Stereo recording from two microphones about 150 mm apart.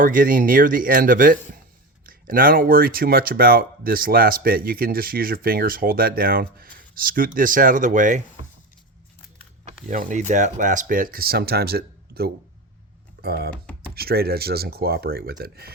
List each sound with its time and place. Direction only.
0.0 s speech: 65° right (ahead or behind)
9.6 s speech: 55° right (ahead or behind); by 15.7 s 90° right